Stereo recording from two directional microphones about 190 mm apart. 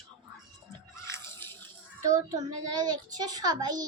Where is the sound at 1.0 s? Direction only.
15° left (ahead or behind).